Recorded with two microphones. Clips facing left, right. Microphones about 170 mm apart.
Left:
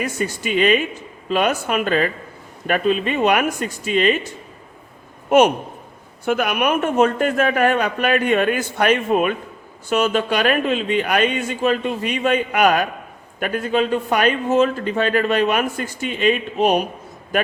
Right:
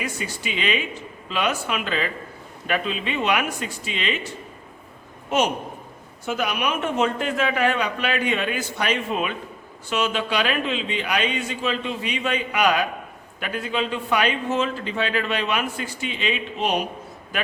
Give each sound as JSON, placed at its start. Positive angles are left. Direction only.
{"t": 0.0, "sound": "a man's voice", "side_deg": 45}
{"t": 5.3, "sound": "a man's voice", "side_deg": 55}